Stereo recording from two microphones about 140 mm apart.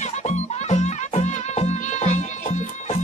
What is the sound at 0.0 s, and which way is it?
Music, 55° left (ahead or behind).